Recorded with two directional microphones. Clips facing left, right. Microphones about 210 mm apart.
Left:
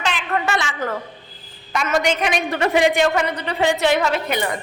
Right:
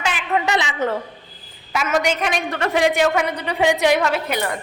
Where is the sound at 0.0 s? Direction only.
10° right (ahead or behind).